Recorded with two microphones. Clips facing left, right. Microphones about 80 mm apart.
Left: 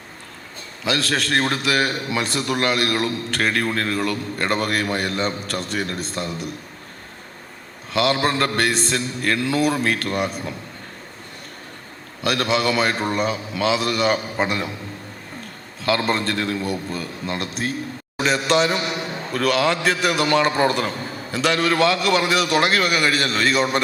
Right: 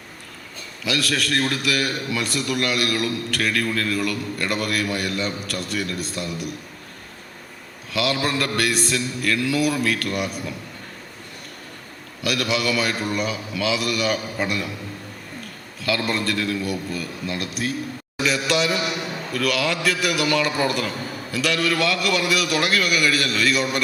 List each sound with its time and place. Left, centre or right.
0.9 s a man's voice: left
7.9 s a man's voice: left
12.2 s a man's voice: left
15.8 s a man's voice: left